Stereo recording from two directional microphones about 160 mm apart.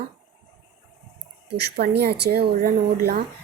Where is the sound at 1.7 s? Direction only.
80° right.